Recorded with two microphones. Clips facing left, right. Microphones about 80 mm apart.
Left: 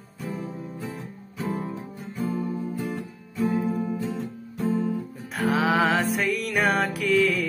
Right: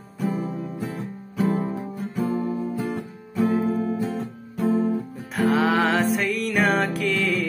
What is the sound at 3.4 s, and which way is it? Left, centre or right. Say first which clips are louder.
Music: right 3 dB; right.